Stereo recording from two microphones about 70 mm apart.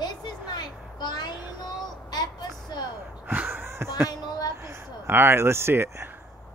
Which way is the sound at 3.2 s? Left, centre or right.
Right.